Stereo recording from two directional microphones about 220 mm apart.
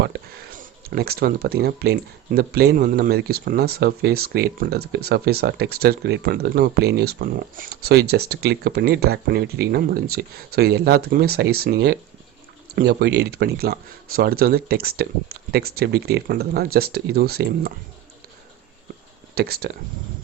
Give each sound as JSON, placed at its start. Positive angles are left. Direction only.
{"t": 0.5, "sound": "speech", "side_deg": -40}
{"t": 19.3, "sound": "speech", "side_deg": -45}